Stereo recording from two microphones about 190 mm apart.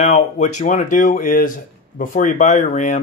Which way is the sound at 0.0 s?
35° left (ahead or behind).